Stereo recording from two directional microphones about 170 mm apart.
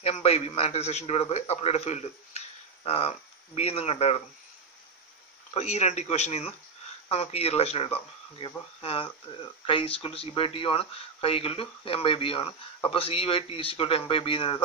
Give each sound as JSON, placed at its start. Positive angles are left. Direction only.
{"t": 0.0, "sound": "speech", "side_deg": 35}
{"t": 5.5, "sound": "speech", "side_deg": 40}